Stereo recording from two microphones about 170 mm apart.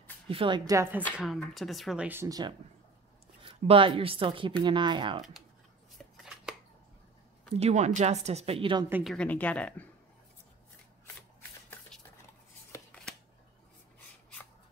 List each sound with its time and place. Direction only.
0.3 s speech: 30° right (ahead or behind)
0.7 s a woman's voice: 15° right (ahead or behind)
1.1 s speech: centre (ahead or behind)
2.0 s speech: 15° right (ahead or behind)
3.4 s speech: 30° right (ahead or behind)
5.9 s chopping: 5° right (ahead or behind)
7.5 s speech: 40° right (ahead or behind)
9.0 s speech: 5° left (ahead or behind)